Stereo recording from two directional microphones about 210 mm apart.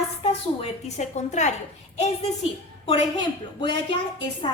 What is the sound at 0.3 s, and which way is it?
A woman's voice, 30° left (ahead or behind).